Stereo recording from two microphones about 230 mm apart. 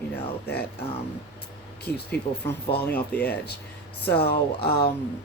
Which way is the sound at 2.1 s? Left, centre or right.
Left.